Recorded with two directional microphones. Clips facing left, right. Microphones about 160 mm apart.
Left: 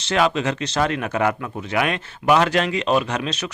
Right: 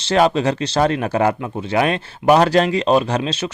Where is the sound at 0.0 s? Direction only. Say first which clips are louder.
Right 4 dB; 35° right (ahead or behind).